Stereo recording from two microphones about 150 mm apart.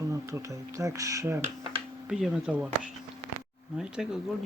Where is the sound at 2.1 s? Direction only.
5° right (ahead or behind).